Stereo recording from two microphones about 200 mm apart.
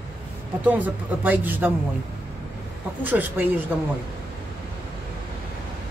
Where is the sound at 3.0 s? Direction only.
10° right (ahead or behind).